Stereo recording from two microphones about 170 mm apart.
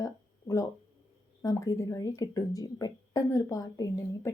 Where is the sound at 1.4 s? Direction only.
20° left (ahead or behind).